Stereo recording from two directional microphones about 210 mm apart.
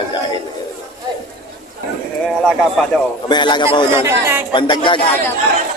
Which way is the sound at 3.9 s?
10° right (ahead or behind).